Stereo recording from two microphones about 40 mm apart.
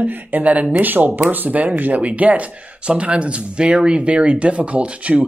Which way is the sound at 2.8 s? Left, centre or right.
Right.